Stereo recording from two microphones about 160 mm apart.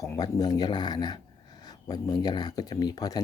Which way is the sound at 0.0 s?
20° left (ahead or behind).